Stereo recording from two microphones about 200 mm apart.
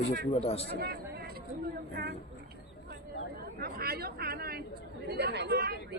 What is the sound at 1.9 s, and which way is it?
Speech, 50° right (ahead or behind).